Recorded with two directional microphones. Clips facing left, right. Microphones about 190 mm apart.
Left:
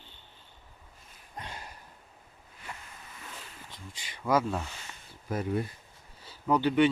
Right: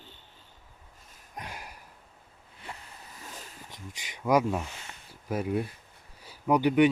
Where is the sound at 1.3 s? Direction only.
10° right (ahead or behind).